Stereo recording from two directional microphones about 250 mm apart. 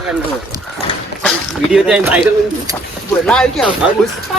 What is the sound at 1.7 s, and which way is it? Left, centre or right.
Speech, centre.